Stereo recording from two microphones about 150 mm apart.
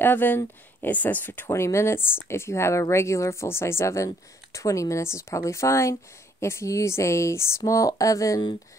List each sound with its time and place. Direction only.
0.0 s speech: 15° left (ahead or behind)